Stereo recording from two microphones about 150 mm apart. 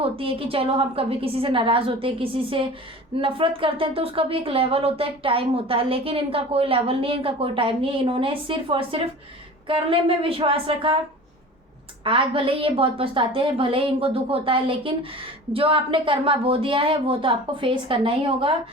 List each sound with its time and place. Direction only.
0.0 s speech: 40° right (ahead or behind)
12.0 s speech: 35° right (ahead or behind)